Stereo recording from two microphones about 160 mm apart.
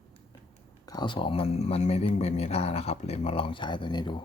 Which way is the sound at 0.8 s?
25° left (ahead or behind).